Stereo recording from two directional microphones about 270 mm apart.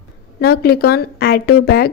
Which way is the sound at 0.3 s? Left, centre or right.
Left.